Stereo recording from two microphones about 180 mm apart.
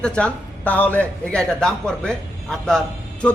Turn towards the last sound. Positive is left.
turn(degrees=5)  # may be behind; listen again after turning